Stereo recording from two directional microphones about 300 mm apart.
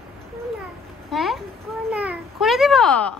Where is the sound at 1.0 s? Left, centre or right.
Centre.